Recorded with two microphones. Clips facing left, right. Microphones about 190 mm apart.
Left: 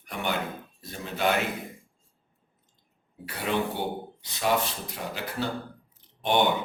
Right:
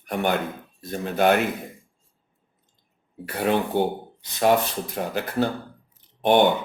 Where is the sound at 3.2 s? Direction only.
50° right (ahead or behind).